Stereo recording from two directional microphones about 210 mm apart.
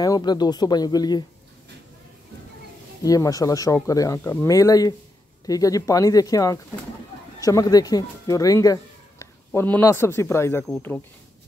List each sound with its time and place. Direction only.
0.0 s speech: 20° left (ahead or behind)
3.0 s speech: 15° left (ahead or behind)